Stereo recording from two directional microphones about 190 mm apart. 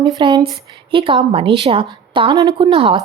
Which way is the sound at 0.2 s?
25° right (ahead or behind).